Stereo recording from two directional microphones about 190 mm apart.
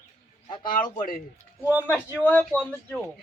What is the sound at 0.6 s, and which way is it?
Speech, 50° left (ahead or behind).